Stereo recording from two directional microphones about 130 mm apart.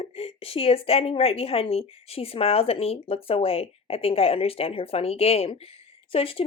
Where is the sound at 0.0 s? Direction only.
50° left (ahead or behind).